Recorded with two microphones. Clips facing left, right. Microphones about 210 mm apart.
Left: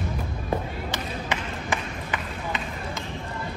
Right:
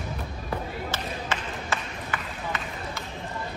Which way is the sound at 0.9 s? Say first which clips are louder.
Left 1 dB; 15° left (ahead or behind).